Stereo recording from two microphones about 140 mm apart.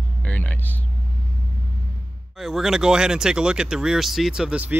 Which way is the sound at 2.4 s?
Centre (ahead or behind).